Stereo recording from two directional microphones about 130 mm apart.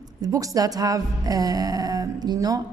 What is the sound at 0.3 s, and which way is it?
A woman's voice, 25° right (ahead or behind).